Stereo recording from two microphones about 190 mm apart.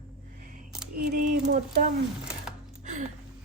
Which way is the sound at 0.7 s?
5° right (ahead or behind).